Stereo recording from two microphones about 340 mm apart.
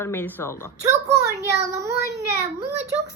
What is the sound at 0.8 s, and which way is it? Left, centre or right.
Speech, centre.